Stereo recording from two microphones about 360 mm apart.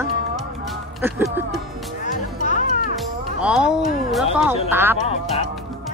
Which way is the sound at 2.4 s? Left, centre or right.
Left.